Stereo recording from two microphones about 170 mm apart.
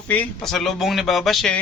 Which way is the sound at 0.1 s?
5° left (ahead or behind).